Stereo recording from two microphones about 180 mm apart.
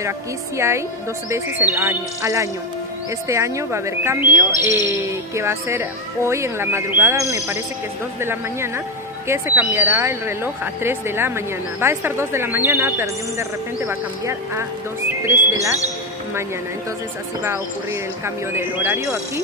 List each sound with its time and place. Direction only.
0.6 s speech: 15° right (ahead or behind)
18.2 s speech: 15° right (ahead or behind)